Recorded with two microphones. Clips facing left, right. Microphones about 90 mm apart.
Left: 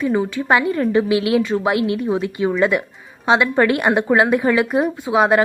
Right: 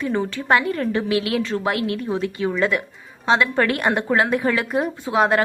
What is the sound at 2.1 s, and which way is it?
A woman's voice, 20° left (ahead or behind).